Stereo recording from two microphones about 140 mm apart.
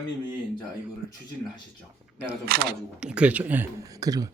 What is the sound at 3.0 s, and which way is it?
Speech, 5° right (ahead or behind).